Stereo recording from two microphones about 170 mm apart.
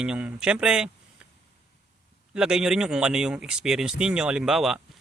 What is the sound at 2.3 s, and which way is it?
Speech, 5° right (ahead or behind).